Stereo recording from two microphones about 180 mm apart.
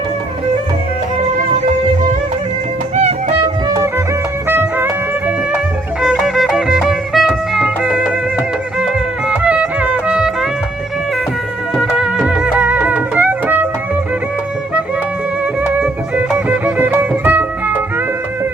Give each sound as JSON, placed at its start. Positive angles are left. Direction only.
{"t": 2.9, "sound": "music", "side_deg": -40}
{"t": 3.7, "sound": "music", "side_deg": -15}
{"t": 6.0, "sound": "music", "side_deg": 0}
{"t": 11.8, "sound": "music", "side_deg": -5}
{"t": 15.8, "sound": "music", "side_deg": -10}